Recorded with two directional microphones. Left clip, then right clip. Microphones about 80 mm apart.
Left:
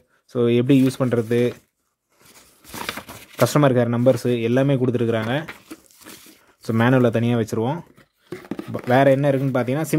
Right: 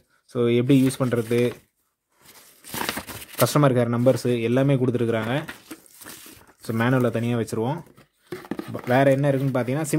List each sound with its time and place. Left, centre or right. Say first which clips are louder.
0.3 s speech: left 2 dB; left
2.6 s a sound: right 3 dB; right
3.4 s speech: left 3 dB; left
6.6 s speech: left 5 dB; left
8.5 s a sound: left 1 dB; centre
8.7 s speech: left 3 dB; left